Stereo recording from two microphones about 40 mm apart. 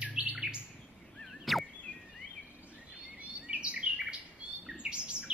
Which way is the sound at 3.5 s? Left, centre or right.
Right.